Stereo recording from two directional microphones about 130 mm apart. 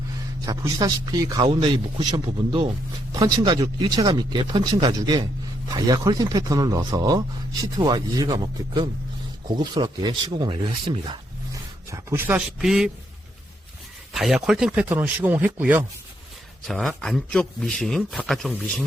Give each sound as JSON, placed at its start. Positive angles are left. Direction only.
{"t": 0.4, "sound": "a man's voice", "side_deg": -30}
{"t": 11.9, "sound": "speech", "side_deg": -20}
{"t": 12.3, "sound": "a man's voice", "side_deg": -5}
{"t": 14.1, "sound": "a man's voice", "side_deg": -5}
{"t": 16.6, "sound": "a man's voice", "side_deg": 0}